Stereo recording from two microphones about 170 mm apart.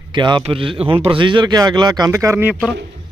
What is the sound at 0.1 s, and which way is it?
Speech, 30° right (ahead or behind).